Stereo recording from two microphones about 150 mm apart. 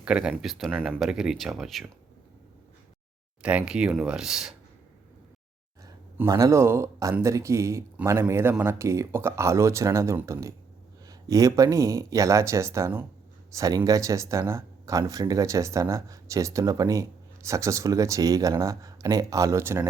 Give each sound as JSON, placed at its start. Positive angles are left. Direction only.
{"t": 0.0, "sound": "speech", "side_deg": -5}
{"t": 3.4, "sound": "speech", "side_deg": -5}
{"t": 5.8, "sound": "speech", "side_deg": -20}